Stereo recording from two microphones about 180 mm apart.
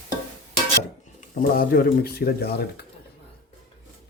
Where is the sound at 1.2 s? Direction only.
55° left (ahead or behind).